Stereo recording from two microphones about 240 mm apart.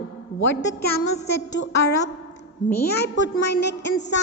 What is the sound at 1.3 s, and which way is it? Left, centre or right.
A woman's voice, left.